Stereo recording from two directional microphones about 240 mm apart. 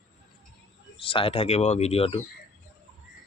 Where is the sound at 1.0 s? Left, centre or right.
Left.